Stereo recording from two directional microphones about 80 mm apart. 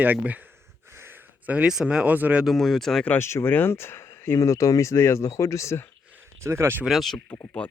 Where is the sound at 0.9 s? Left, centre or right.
Right.